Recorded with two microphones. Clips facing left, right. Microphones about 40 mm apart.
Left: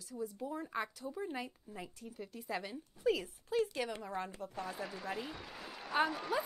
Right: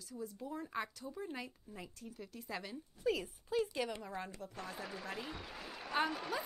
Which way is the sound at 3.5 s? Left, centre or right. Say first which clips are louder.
Left 2 dB; centre.